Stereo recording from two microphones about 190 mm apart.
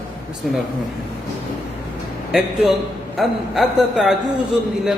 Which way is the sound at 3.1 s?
Centre (ahead or behind).